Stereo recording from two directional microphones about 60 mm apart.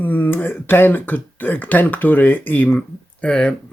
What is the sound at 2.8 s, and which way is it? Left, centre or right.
Speech, centre.